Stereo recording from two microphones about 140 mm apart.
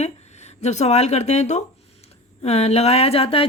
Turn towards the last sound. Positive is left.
turn(degrees=45)  # may be behind; listen again after turning